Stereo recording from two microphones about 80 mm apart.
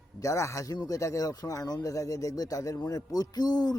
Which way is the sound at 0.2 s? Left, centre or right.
Left.